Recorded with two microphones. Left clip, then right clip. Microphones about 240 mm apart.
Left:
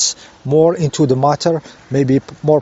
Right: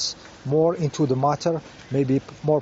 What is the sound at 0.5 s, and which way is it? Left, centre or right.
Speech, left.